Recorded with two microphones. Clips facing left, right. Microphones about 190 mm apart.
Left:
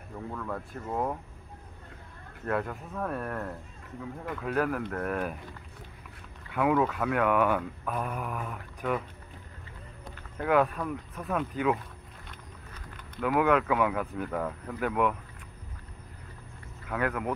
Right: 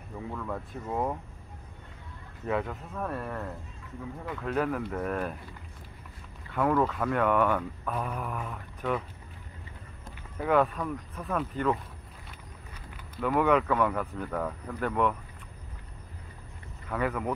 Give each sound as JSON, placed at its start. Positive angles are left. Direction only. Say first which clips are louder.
{"t": 0.3, "sound": "speech", "louder": "even", "side_deg": -5}
{"t": 2.4, "sound": "speech", "louder": "even", "side_deg": 0}
{"t": 6.5, "sound": "speech", "louder": "even", "side_deg": 5}
{"t": 10.3, "sound": "speech", "louder": "even", "side_deg": 0}
{"t": 12.9, "sound": "a sound", "louder": "even", "side_deg": -5}
{"t": 13.3, "sound": "speech", "louder": "even", "side_deg": 0}
{"t": 16.9, "sound": "speech", "louder": "even", "side_deg": 0}